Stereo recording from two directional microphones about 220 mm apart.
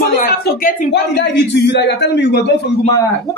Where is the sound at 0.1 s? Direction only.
35° left (ahead or behind).